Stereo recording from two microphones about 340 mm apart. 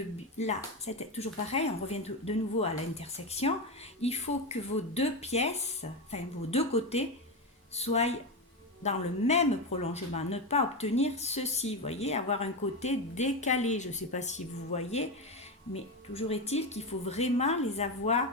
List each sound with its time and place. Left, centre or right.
0.3 s speech: centre